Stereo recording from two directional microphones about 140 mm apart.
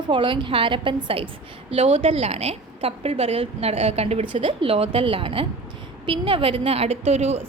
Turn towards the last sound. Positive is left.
turn(degrees=-50)  # may be behind; listen again after turning